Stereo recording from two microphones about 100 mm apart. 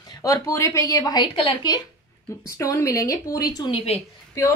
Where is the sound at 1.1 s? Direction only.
55° left (ahead or behind).